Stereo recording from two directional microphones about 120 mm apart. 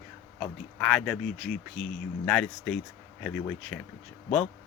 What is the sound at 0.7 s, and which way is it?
Speech, 5° left (ahead or behind).